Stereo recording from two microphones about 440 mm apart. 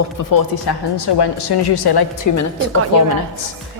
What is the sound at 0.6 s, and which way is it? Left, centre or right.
A woman's voice, left.